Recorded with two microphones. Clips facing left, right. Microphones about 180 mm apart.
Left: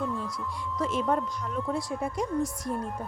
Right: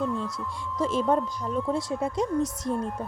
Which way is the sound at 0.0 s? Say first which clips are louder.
Right 3 dB; centre (ahead or behind).